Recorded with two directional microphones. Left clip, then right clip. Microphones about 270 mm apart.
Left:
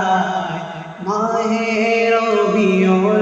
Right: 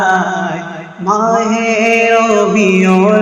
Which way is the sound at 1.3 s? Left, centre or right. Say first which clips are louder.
Right 6 dB; centre.